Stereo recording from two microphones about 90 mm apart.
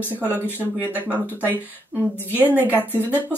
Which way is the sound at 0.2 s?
20° left (ahead or behind).